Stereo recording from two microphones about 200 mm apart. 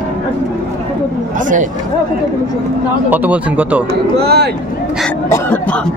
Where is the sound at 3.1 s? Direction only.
5° right (ahead or behind).